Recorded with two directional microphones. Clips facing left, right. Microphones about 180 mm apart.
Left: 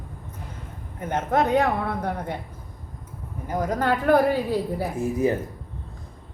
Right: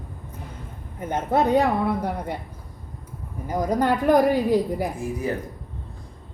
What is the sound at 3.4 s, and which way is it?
Speech, 10° right (ahead or behind).